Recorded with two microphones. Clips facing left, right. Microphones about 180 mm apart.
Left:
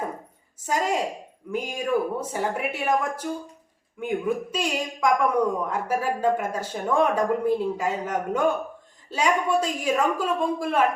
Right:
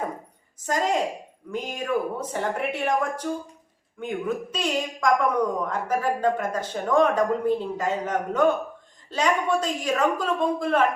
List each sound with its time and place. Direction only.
0.7 s a woman's voice: 10° left (ahead or behind)
4.5 s a woman's voice: 10° left (ahead or behind)